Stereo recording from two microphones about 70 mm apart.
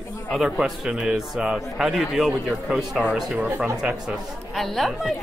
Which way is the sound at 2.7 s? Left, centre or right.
Centre.